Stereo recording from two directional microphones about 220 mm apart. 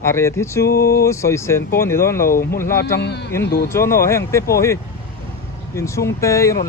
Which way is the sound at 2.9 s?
50° left (ahead or behind).